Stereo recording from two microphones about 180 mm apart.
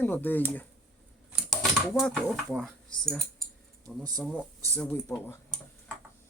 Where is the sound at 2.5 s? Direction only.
Centre (ahead or behind).